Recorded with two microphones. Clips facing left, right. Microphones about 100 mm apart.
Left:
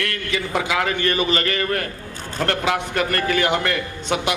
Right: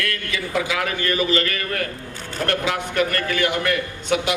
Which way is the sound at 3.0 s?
30° left (ahead or behind).